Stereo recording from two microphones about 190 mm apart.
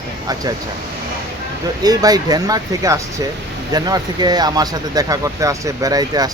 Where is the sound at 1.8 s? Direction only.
20° right (ahead or behind).